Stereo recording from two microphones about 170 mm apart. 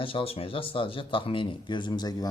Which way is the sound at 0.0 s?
35° left (ahead or behind).